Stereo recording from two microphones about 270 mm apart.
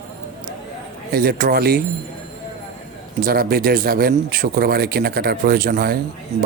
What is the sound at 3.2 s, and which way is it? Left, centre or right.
Speech, right.